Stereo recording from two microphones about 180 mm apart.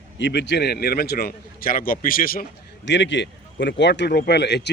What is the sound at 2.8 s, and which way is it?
Speech, 80° left.